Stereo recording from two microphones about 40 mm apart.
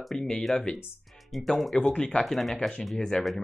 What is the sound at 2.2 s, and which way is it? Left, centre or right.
Speech, centre.